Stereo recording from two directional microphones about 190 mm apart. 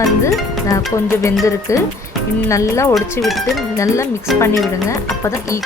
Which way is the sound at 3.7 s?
15° left (ahead or behind).